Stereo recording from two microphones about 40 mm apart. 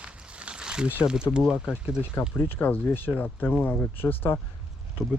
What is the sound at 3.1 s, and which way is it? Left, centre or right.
Speech, left.